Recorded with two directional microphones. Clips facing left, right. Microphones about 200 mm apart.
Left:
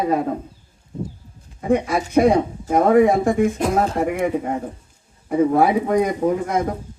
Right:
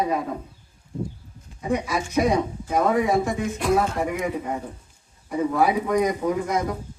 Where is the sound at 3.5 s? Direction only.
35° left (ahead or behind).